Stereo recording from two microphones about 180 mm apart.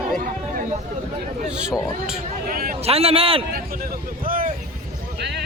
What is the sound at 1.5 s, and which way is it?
Speech, 5° right (ahead or behind).